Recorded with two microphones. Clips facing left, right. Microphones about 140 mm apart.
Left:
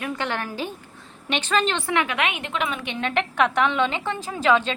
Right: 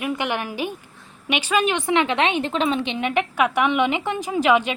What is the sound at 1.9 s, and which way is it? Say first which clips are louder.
A woman's voice: right 4 dB; 25° right (ahead or behind).